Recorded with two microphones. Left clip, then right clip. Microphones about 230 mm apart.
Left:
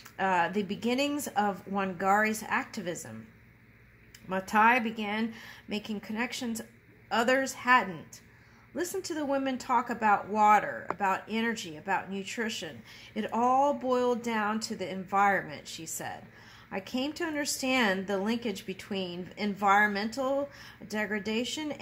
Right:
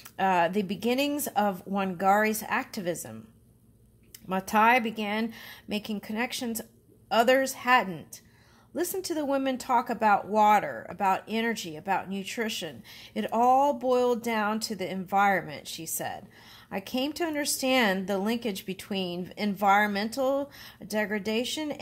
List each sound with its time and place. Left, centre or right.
0.2 s speech: right
4.3 s speech: right